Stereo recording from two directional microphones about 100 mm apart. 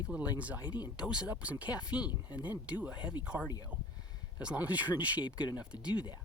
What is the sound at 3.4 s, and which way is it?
Speech, 40° left (ahead or behind).